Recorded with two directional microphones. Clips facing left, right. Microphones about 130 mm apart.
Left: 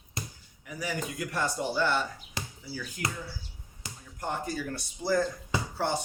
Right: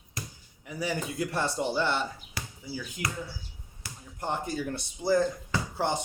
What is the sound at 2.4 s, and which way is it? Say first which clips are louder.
Basketball bounce: left 2 dB; 20° left (ahead or behind).